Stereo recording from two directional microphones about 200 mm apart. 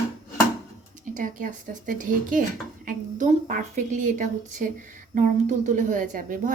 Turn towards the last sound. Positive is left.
turn(degrees=-40)  # may be behind; listen again after turning